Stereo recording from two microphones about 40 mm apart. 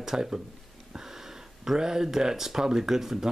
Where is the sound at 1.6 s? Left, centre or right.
Centre.